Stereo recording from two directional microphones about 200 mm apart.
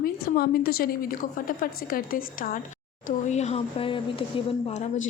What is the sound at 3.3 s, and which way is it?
Speech, 35° left (ahead or behind).